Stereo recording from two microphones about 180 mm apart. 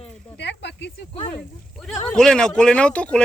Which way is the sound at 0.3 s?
75° left (ahead or behind).